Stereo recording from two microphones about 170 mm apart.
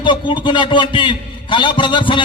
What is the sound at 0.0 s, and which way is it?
A man's voice, 30° left (ahead or behind).